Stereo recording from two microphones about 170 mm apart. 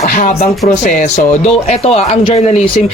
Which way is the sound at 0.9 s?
40° left (ahead or behind).